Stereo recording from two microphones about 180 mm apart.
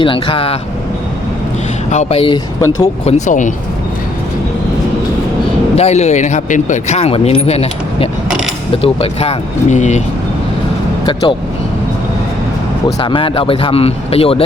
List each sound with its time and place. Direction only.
0.0 s speech: 30° left (ahead or behind)
1.9 s speech: 40° left (ahead or behind)
3.1 s speech: 40° left (ahead or behind)
5.7 s speech: 35° left (ahead or behind)
11.0 s speech: 25° left (ahead or behind)
13.0 s speech: 30° left (ahead or behind)